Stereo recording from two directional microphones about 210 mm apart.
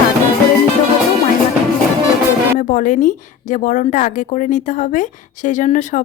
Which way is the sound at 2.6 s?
40° left (ahead or behind).